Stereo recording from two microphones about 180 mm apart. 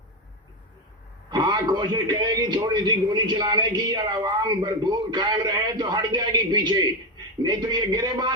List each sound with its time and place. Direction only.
1.3 s a man's voice: 25° right (ahead or behind)